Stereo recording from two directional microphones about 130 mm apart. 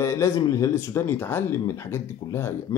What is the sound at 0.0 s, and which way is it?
Speech, 20° left (ahead or behind).